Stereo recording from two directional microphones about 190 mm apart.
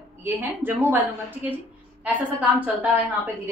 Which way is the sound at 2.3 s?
10° right (ahead or behind).